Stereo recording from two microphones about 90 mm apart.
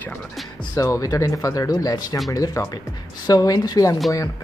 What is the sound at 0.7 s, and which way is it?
A woman's voice, 35° left (ahead or behind).